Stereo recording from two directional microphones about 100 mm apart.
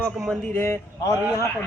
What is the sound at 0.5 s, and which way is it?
Speech, 25° left (ahead or behind).